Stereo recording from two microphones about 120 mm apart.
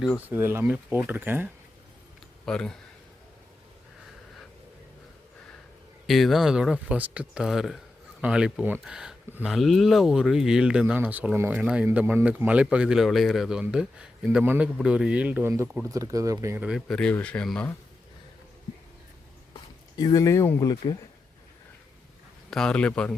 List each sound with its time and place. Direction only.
0.3 s a man's voice: 20° right (ahead or behind)
2.5 s speech: 5° left (ahead or behind)
6.1 s a man's voice: centre (ahead or behind)
14.4 s a man's voice: 20° right (ahead or behind)
14.8 s a man's voice: 5° right (ahead or behind); by 16.6 s 25° right (ahead or behind)
16.6 s a man's voice: 5° right (ahead or behind)
16.9 s speech: 10° left (ahead or behind)
20.0 s speech: 30° left (ahead or behind)
22.4 s speech: 5° left (ahead or behind)